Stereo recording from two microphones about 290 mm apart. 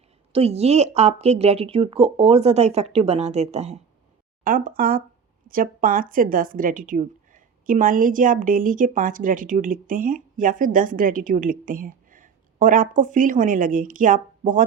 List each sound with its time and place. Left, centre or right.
0.3 s speech: right